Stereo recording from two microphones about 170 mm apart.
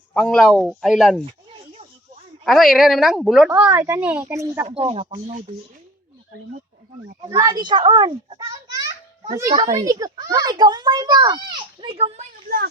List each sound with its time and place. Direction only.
0.1 s a woman's voice: 5° left (ahead or behind)
1.2 s a sound: 35° right (ahead or behind)
2.4 s a woman's voice: centre (ahead or behind)
3.5 s speech: 10° right (ahead or behind)
4.6 s speech: 35° right (ahead or behind)
7.3 s a child's voice: 20° right (ahead or behind); by 12.2 s 35° right (ahead or behind)